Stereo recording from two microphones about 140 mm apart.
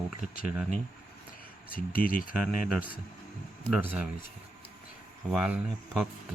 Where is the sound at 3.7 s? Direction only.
10° right (ahead or behind).